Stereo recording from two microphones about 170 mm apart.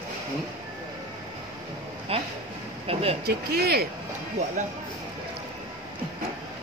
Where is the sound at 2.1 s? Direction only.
35° right (ahead or behind).